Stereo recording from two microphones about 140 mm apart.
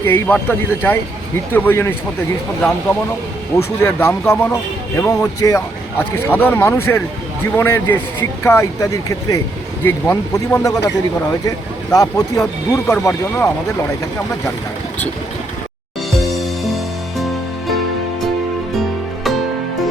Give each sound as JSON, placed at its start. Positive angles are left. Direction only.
{"t": 0.0, "sound": "a man's voice", "side_deg": 15}
{"t": 3.8, "sound": "a man's voice", "side_deg": 15}
{"t": 16.3, "sound": "music", "side_deg": 0}